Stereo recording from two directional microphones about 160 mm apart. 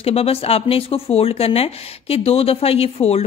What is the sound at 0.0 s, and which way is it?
Speech, 40° left (ahead or behind).